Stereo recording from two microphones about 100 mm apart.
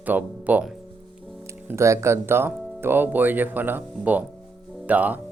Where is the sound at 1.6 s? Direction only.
30° right (ahead or behind).